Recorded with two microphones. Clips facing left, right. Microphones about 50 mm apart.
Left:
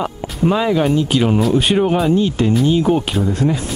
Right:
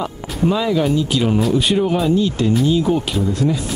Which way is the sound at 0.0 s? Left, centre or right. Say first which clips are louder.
Left 1 dB; left.